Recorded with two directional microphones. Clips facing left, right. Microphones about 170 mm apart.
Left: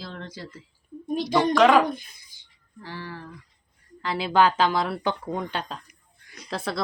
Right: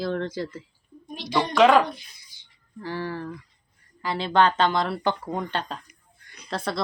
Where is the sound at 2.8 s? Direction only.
45° right (ahead or behind).